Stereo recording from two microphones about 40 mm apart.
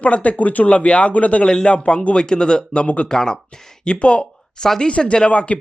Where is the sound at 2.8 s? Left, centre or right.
Left.